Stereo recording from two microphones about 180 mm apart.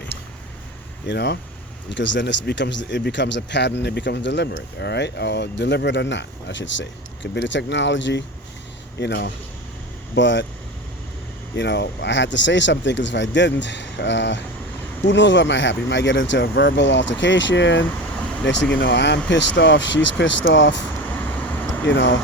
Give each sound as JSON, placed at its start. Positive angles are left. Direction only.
{"t": 1.0, "sound": "speech", "side_deg": 70}
{"t": 9.0, "sound": "speech", "side_deg": 70}
{"t": 10.2, "sound": "speech", "side_deg": 85}
{"t": 11.5, "sound": "speech", "side_deg": 75}
{"t": 20.9, "sound": "vehicle", "side_deg": 10}
{"t": 21.8, "sound": "speech", "side_deg": 90}